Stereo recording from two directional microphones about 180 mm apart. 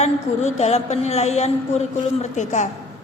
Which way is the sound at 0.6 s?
35° left (ahead or behind).